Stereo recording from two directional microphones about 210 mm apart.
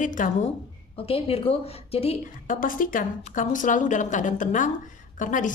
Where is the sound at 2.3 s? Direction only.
40° left (ahead or behind).